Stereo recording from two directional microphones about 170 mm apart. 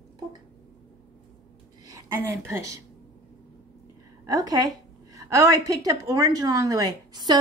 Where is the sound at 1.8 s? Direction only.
15° right (ahead or behind).